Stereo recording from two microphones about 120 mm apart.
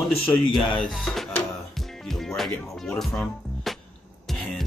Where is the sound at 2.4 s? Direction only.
5° left (ahead or behind).